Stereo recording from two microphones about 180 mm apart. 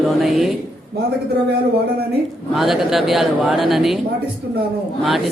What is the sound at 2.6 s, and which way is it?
Speech, centre (ahead or behind).